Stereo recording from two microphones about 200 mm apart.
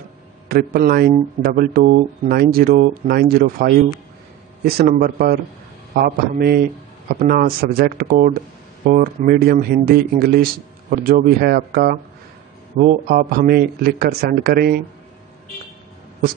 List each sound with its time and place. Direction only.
0.5 s speech: 50° right (ahead or behind)